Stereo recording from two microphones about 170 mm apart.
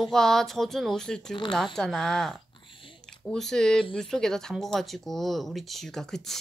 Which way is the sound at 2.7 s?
30° left (ahead or behind).